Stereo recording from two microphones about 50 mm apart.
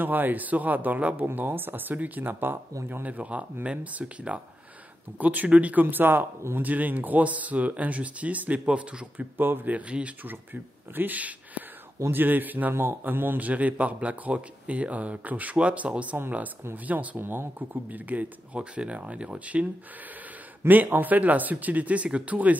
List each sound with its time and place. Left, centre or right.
0.0 s a man's voice: right
5.2 s speech: right
9.4 s speech: right
10.2 s a man's voice: right
17.2 s speech: right
17.8 s a man's voice: right
20.6 s speech: right